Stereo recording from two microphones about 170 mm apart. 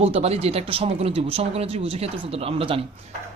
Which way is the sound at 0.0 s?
35° right (ahead or behind).